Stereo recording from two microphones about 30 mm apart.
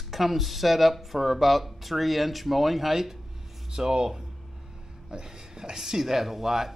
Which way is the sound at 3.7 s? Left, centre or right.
Centre.